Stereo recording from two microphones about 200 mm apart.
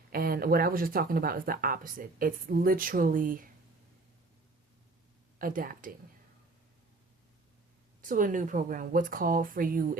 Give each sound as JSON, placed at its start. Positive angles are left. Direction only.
{"t": 0.1, "sound": "a woman's voice", "side_deg": -50}
{"t": 5.4, "sound": "a woman's voice", "side_deg": -45}
{"t": 8.0, "sound": "a woman's voice", "side_deg": -40}